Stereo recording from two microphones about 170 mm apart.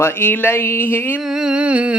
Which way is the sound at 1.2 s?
5° right (ahead or behind).